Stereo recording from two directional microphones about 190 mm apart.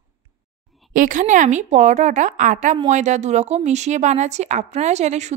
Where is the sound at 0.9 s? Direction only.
45° right (ahead or behind).